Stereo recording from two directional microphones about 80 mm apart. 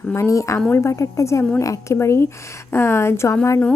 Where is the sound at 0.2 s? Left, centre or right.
Left.